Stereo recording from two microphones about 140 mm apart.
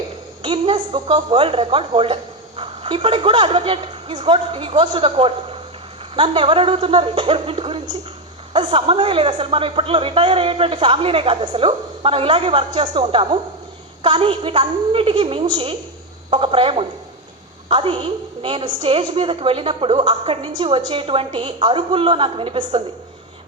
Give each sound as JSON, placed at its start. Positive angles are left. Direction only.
{"t": 0.4, "sound": "speech", "side_deg": -40}